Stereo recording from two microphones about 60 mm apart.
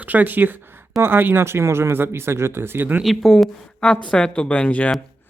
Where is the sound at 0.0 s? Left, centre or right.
Right.